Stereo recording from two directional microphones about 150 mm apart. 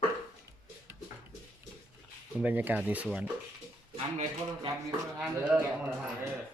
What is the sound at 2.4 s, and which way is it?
Speech, 10° right (ahead or behind).